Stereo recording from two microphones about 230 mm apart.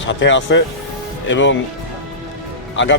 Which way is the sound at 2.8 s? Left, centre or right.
Left.